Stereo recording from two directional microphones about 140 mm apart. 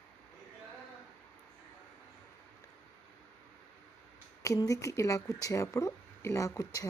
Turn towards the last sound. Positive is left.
turn(degrees=25)  # may be behind; listen again after turning